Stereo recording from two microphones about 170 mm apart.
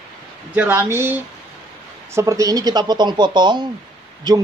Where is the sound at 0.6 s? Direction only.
15° right (ahead or behind).